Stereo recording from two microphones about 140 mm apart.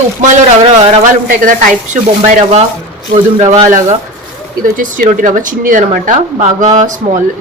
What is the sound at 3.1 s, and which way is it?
Speech, 50° right (ahead or behind).